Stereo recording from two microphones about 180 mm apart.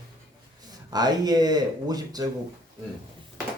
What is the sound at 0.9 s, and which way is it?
Speech, 20° right (ahead or behind).